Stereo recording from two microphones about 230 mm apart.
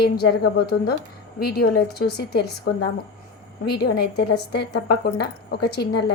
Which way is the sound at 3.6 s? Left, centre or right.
Left.